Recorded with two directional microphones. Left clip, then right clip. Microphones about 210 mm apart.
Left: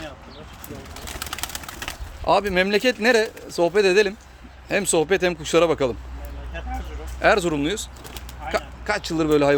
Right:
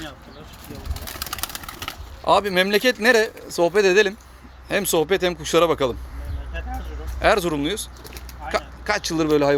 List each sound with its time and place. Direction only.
1.0 s a sound: 25° right (ahead or behind)
1.4 s speech: 5° right (ahead or behind)
7.2 s speech: 5° left (ahead or behind)